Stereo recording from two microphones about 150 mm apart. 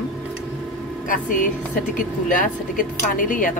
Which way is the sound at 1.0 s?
60° left (ahead or behind).